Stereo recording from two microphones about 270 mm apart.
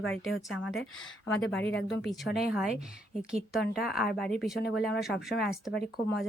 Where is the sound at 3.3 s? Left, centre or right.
Centre.